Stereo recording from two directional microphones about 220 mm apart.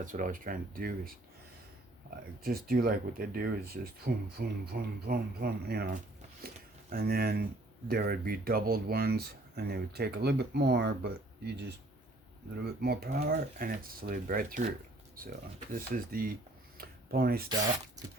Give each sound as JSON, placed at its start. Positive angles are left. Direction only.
{"t": 0.0, "sound": "speech", "side_deg": -35}
{"t": 2.4, "sound": "speech", "side_deg": -40}
{"t": 6.4, "sound": "a sound", "side_deg": -45}
{"t": 6.9, "sound": "speech", "side_deg": -45}
{"t": 15.7, "sound": "speech", "side_deg": -40}
{"t": 16.7, "sound": "a sound", "side_deg": -40}